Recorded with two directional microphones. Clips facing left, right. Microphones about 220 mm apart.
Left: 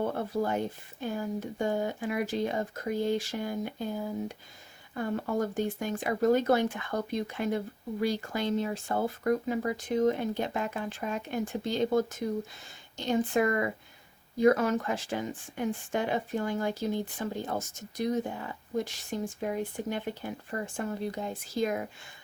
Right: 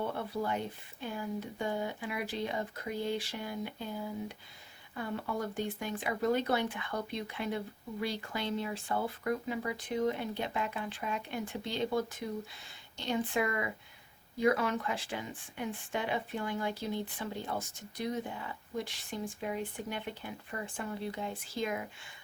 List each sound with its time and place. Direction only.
0.0 s speech: 45° left (ahead or behind)